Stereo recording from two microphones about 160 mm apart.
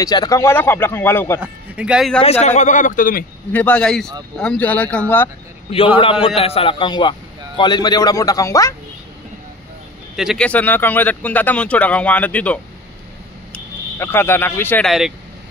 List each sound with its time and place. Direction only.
0.0 s speech: 25° left (ahead or behind)
1.4 s speech: 5° right (ahead or behind)
2.4 s a man's voice: 50° left (ahead or behind)
3.5 s speech: 5° left (ahead or behind)
6.2 s a man's voice: 40° left (ahead or behind); by 8.7 s 20° left (ahead or behind)
10.1 s speech: centre (ahead or behind)
14.9 s speech: centre (ahead or behind)